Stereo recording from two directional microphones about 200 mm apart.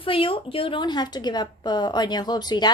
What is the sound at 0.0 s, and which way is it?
A woman's voice, 25° left (ahead or behind).